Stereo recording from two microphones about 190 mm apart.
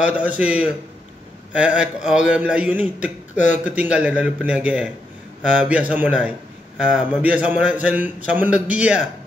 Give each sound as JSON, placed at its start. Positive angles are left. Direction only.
{"t": 0.0, "sound": "a man's voice", "side_deg": -5}
{"t": 3.3, "sound": "speech", "side_deg": 40}
{"t": 3.6, "sound": "a man's voice", "side_deg": -10}